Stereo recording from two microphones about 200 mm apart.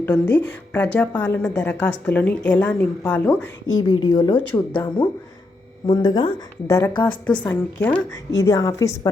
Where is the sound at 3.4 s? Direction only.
85° left.